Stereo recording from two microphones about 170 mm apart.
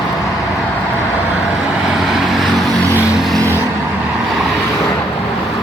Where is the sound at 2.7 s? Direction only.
15° right (ahead or behind).